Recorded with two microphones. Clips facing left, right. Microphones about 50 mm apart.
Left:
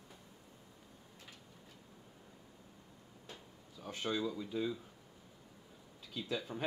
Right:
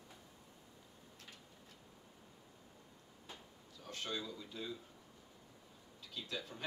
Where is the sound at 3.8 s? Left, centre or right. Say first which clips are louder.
Left 6 dB; centre.